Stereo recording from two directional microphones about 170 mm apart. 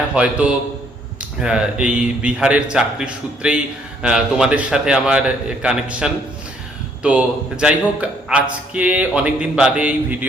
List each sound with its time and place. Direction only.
0.1 s a man's voice: 5° right (ahead or behind)